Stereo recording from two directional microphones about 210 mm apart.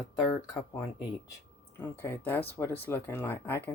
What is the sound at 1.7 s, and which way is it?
Speech, 10° left (ahead or behind).